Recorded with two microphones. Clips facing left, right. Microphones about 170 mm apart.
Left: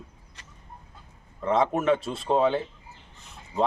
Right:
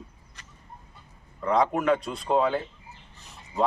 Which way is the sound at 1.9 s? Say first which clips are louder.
Even; centre (ahead or behind).